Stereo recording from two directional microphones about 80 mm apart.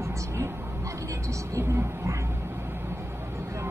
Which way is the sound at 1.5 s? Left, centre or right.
Right.